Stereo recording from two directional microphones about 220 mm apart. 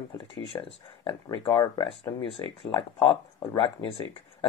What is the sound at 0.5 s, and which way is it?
Speech, 15° left (ahead or behind).